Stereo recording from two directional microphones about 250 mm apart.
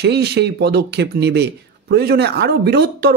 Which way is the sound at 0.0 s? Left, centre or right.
Right.